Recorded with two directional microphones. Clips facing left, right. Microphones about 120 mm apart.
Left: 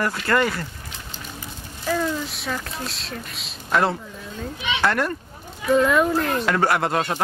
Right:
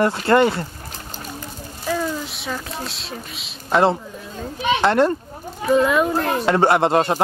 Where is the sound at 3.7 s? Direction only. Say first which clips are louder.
Right 4 dB; 25° right (ahead or behind).